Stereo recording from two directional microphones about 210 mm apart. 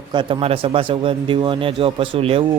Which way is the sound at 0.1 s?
25° right (ahead or behind).